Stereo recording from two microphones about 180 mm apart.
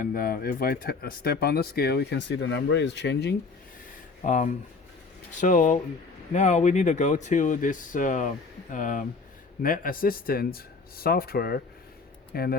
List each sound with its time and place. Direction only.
0.0 s speech: 50° left (ahead or behind); by 3.3 s 70° left (ahead or behind)
4.3 s speech: 45° left (ahead or behind)